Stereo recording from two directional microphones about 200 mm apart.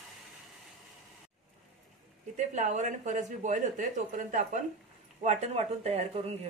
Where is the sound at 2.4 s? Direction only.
35° right (ahead or behind).